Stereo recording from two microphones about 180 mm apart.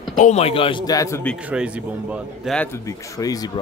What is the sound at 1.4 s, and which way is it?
A man's voice, 5° right (ahead or behind).